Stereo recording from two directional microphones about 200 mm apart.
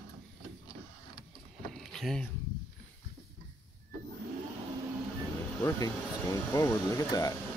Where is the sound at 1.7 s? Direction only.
Centre (ahead or behind).